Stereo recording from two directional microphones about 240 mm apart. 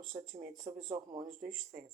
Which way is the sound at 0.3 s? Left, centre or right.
Right.